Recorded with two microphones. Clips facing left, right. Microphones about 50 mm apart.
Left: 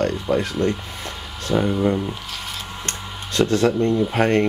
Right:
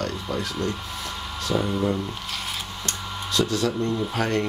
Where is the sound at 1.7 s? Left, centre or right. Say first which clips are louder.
Left 4 dB; centre.